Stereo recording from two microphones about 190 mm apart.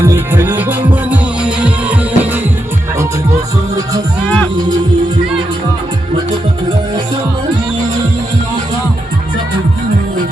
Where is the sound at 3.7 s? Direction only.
20° right (ahead or behind).